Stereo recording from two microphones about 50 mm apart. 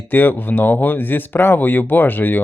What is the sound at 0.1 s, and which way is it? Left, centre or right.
Speech, left.